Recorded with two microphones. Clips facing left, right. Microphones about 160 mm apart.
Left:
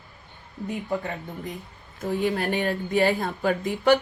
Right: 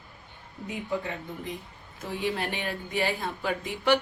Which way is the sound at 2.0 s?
45° left (ahead or behind).